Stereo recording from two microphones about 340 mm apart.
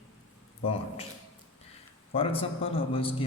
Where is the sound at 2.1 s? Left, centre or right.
Centre.